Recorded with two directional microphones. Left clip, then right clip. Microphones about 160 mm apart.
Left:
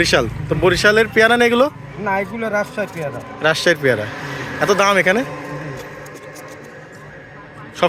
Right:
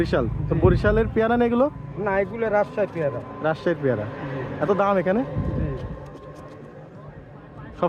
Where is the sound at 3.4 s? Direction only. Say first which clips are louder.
Left 9 dB; centre (ahead or behind).